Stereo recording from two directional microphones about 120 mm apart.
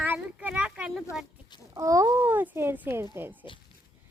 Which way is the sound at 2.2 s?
15° right (ahead or behind).